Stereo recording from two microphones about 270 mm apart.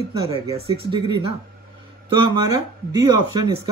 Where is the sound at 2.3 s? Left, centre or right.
Centre.